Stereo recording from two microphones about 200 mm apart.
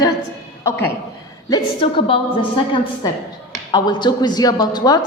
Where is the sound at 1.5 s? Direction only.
20° left (ahead or behind).